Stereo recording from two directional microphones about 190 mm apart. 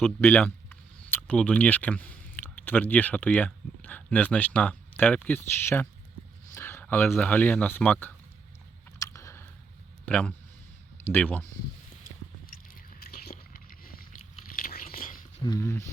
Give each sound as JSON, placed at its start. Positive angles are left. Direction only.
{"t": 0.0, "sound": "speech", "side_deg": 10}
{"t": 6.5, "sound": "a sound", "side_deg": 10}
{"t": 7.1, "sound": "speech", "side_deg": 10}
{"t": 9.0, "sound": "a sound", "side_deg": 15}
{"t": 10.1, "sound": "speech", "side_deg": 5}
{"t": 12.5, "sound": "biting", "side_deg": 50}
{"t": 14.5, "sound": "whispering", "side_deg": 45}
{"t": 15.4, "sound": "speech", "side_deg": 20}